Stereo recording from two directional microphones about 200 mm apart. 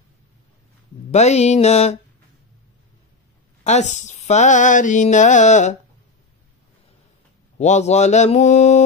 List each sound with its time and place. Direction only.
1.1 s speech: 35° left (ahead or behind)
3.6 s speech: 35° left (ahead or behind)
7.5 s speech: 35° left (ahead or behind)